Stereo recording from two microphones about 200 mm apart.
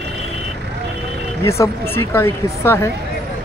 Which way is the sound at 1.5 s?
15° left (ahead or behind).